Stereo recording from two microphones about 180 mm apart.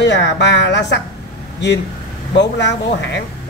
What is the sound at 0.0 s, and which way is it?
Speech, 75° left (ahead or behind).